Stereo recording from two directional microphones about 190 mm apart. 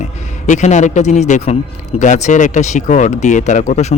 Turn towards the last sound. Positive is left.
turn(degrees=35)  # may be behind; listen again after turning